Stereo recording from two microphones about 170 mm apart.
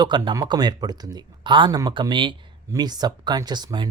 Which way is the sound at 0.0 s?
25° right (ahead or behind).